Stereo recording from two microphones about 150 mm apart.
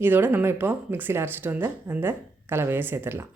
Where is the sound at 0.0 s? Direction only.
15° right (ahead or behind).